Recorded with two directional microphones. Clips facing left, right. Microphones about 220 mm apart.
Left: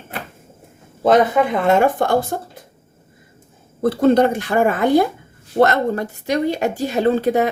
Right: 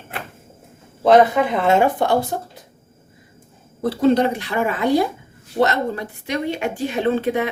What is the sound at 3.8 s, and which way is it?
A woman's voice, 50° left (ahead or behind).